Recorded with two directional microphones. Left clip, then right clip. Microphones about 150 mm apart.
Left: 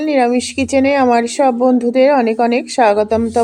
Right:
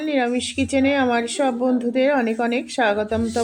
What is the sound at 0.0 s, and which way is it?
Speech, 30° left (ahead or behind).